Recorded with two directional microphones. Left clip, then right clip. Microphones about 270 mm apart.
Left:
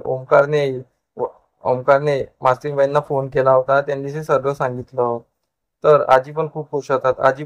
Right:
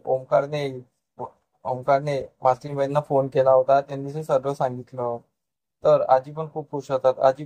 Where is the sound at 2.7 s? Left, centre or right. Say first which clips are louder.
Left 5 dB; left.